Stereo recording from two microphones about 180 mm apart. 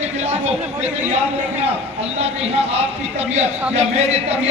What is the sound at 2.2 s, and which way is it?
A man's voice, 35° right (ahead or behind).